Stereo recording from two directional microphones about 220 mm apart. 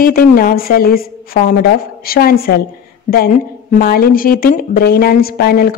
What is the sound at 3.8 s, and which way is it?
A woman's voice, 45° left (ahead or behind).